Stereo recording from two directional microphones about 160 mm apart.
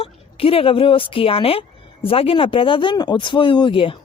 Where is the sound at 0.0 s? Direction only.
35° left (ahead or behind).